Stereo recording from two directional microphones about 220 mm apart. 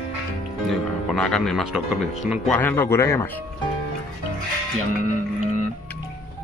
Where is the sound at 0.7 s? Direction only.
Centre (ahead or behind).